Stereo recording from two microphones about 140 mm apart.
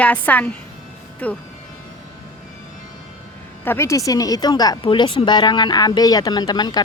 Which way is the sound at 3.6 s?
15° left (ahead or behind).